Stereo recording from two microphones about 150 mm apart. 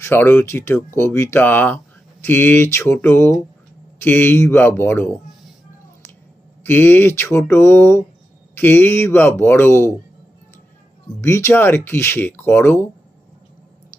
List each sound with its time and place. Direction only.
0.0 s speech: 15° left (ahead or behind)
6.6 s speech: 15° left (ahead or behind)
11.2 s speech: 20° left (ahead or behind)